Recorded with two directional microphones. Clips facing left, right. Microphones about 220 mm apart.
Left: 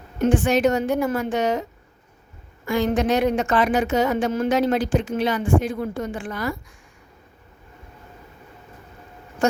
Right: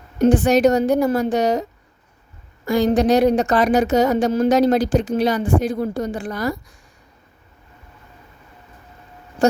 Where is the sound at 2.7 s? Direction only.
35° right (ahead or behind).